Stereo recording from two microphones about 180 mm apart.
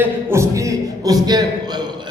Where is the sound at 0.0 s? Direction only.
15° right (ahead or behind).